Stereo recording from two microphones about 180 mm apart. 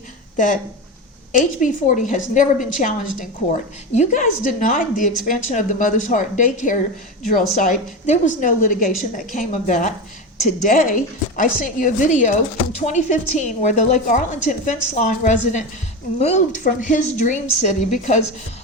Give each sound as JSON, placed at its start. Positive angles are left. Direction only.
{"t": 0.3, "sound": "a woman's voice", "side_deg": 45}
{"t": 3.9, "sound": "a woman's voice", "side_deg": 40}